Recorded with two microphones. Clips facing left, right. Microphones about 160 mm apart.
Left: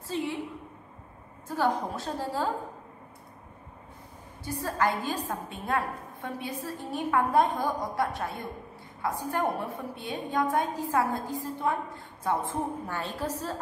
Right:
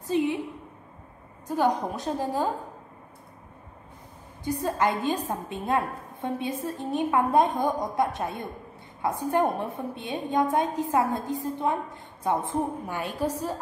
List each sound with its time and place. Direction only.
0.0 s a woman's voice: 20° right (ahead or behind)
1.5 s a woman's voice: 15° right (ahead or behind)
4.5 s a woman's voice: 20° right (ahead or behind)